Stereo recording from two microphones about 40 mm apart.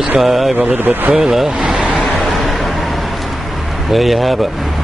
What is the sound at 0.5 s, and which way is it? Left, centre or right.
Speech, right.